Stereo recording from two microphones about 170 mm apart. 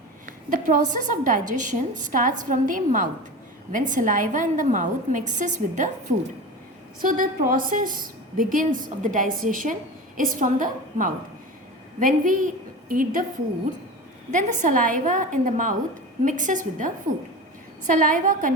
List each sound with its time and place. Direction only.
0.3 s a woman's voice: 50° right (ahead or behind)
14.3 s a woman's voice: 50° right (ahead or behind)